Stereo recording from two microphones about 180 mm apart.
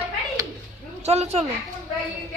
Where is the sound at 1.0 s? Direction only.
35° right (ahead or behind).